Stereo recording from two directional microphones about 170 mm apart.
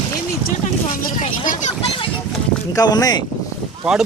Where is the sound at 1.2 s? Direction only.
35° left (ahead or behind).